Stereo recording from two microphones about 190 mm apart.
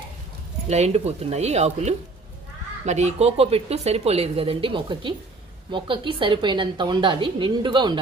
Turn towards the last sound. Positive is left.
turn(degrees=-25)  # may be behind; listen again after turning